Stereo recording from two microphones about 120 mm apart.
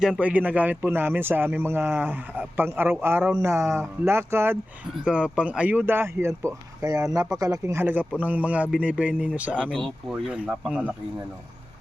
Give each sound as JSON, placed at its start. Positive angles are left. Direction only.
{"t": 0.0, "sound": "speech", "side_deg": -10}
{"t": 5.0, "sound": "speech", "side_deg": -10}
{"t": 9.7, "sound": "speech", "side_deg": 0}